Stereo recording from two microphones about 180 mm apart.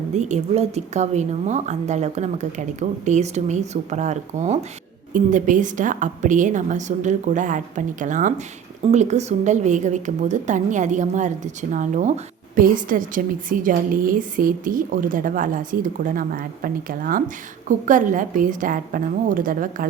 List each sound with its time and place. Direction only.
0.1 s a woman's voice: 40° right (ahead or behind)